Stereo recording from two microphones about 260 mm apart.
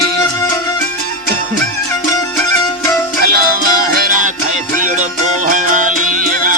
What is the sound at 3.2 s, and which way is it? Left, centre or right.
Music, right.